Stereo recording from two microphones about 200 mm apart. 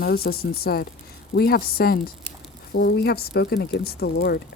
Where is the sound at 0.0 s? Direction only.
50° left (ahead or behind).